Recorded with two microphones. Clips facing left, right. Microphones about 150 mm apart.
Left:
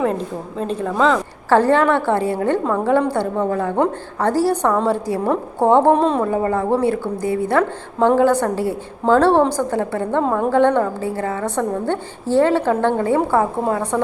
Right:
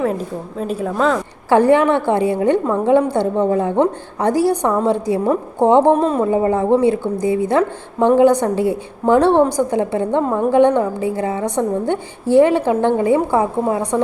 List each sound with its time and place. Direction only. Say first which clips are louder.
0.0 s a woman's voice: even; 5° right (ahead or behind)
5.9 s a woman's voice: right 1 dB; 5° right (ahead or behind)
6.2 s a woman's voice: right 3 dB; 20° right (ahead or behind)